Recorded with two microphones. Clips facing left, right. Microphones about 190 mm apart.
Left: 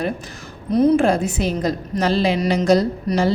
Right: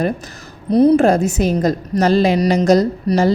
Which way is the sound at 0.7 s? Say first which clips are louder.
Right 4 dB; 35° right (ahead or behind).